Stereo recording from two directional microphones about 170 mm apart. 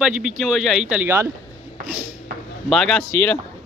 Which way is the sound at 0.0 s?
5° right (ahead or behind).